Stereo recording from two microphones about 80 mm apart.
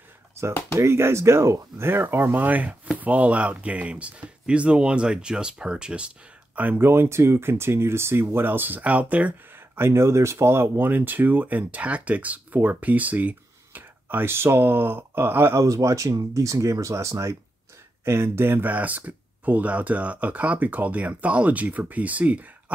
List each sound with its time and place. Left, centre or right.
0.4 s a sound: right
0.7 s speech: right
6.9 s speech: right
9.8 s speech: right
15.6 s speech: right; by 22.5 s centre